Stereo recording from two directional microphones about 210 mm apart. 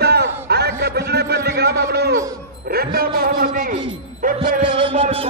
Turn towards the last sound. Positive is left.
turn(degrees=-25)  # may be behind; listen again after turning